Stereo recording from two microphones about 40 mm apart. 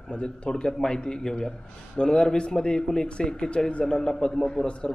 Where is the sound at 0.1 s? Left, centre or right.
Left.